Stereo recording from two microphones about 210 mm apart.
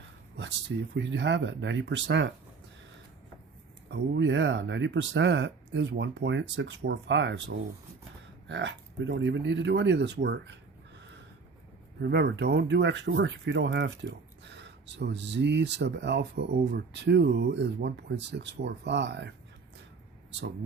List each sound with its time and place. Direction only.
0.9 s speech: 55° right (ahead or behind)
3.8 s speech: 55° right (ahead or behind)